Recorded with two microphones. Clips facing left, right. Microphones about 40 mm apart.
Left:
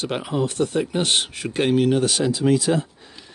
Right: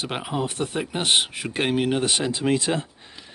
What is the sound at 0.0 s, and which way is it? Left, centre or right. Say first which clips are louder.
Speech: left 3 dB; centre.